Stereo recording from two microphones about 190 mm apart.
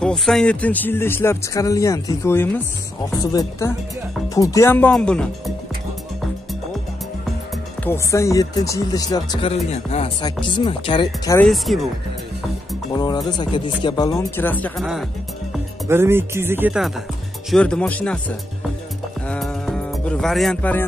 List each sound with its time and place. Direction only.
0.0 s speech: 5° left (ahead or behind)
7.8 s speech: 15° left (ahead or behind)
9.7 s speech: 35° left (ahead or behind)
11.3 s speech: centre (ahead or behind)
12.9 s speech: 20° left (ahead or behind)
15.9 s speech: 10° right (ahead or behind)
17.5 s speech: 5° left (ahead or behind)
19.2 s music: 5° left (ahead or behind)